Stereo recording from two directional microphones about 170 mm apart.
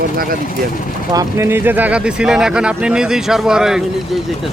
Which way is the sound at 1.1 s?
20° right (ahead or behind).